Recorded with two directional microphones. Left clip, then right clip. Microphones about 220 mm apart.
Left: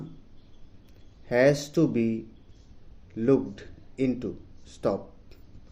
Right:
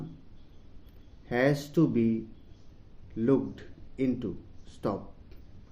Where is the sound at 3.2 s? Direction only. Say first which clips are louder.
Left 3 dB; 30° left (ahead or behind).